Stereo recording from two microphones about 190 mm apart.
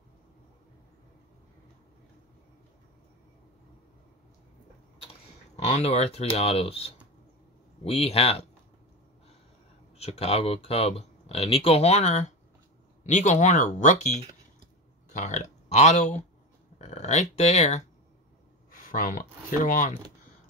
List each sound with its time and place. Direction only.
5.6 s speech: 35° left (ahead or behind)
9.9 s speech: 35° left (ahead or behind)